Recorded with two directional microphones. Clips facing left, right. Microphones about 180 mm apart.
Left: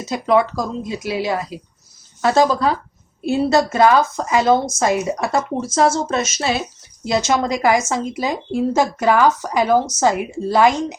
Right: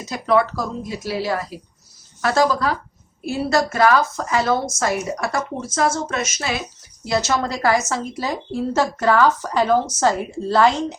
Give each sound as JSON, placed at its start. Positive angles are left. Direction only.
{"t": 0.1, "sound": "a woman's voice", "side_deg": 20}
{"t": 7.0, "sound": "a woman's voice", "side_deg": 20}